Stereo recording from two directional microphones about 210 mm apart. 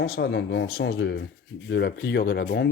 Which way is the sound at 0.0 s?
55° left (ahead or behind).